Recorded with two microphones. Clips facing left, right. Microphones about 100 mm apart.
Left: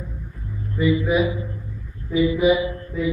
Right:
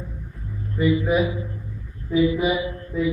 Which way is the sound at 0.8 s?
35° right (ahead or behind).